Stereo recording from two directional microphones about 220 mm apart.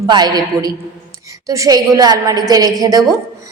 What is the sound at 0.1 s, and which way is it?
A man's voice, 20° right (ahead or behind).